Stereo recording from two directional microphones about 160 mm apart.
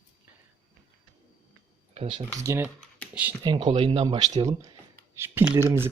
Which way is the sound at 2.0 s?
30° right (ahead or behind).